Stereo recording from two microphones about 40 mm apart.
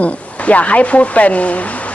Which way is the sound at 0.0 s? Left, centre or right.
Left.